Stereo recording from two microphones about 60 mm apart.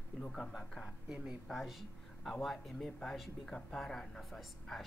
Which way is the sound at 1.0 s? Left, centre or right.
Centre.